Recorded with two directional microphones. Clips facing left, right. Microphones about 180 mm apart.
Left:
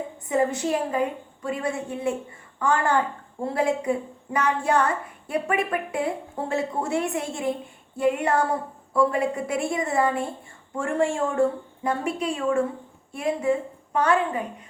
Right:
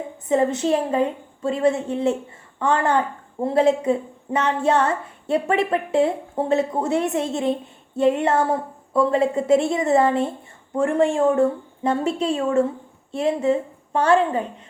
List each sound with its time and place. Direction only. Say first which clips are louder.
0.3 s a woman's voice: right 4 dB; 25° right (ahead or behind)